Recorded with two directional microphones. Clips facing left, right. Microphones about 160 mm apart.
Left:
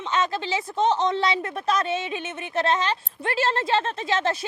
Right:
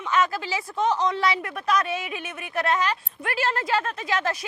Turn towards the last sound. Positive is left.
turn(degrees=25)  # may be behind; listen again after turning